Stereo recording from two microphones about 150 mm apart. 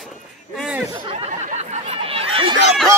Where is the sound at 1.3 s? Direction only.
55° right (ahead or behind).